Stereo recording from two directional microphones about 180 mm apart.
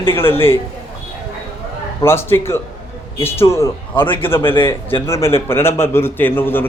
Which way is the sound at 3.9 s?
30° left (ahead or behind).